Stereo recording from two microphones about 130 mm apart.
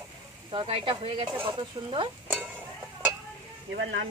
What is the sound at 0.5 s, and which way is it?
Speech, 40° right (ahead or behind).